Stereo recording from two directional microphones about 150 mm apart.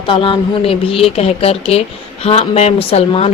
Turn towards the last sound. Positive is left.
turn(degrees=40)  # may be behind; listen again after turning